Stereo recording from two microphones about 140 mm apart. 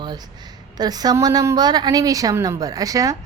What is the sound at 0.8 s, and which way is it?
A woman's voice, 30° right (ahead or behind).